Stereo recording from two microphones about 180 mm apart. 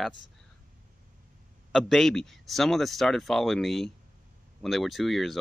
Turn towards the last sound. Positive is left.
turn(degrees=0)  # may be behind; listen again after turning